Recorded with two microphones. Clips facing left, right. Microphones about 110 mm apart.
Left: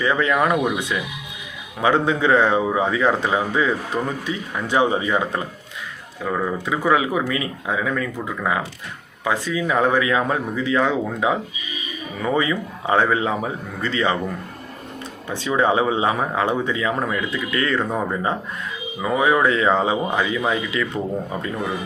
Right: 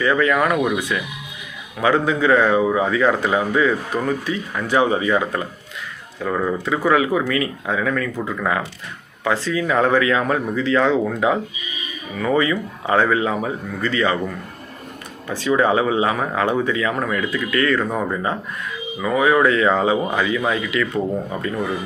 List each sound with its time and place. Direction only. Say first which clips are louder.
0.0 s speech: right 2 dB; 20° left (ahead or behind)
6.2 s speech: right 2 dB; 5° left (ahead or behind)
6.7 s speech: right 2 dB; 15° left (ahead or behind)
15.3 s speech: right 2 dB; 20° left (ahead or behind)